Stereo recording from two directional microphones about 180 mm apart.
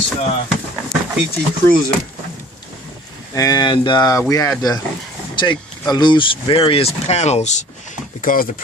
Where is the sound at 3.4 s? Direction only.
20° left (ahead or behind).